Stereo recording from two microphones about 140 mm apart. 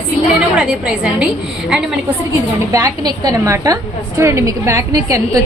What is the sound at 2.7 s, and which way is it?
A woman's voice, 25° right (ahead or behind).